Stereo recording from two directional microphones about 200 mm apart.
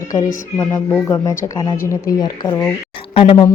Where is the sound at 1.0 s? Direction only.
15° left (ahead or behind).